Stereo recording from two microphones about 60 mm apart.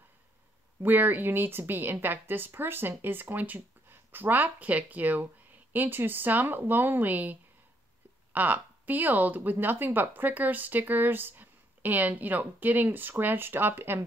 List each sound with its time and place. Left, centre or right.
0.8 s speech: right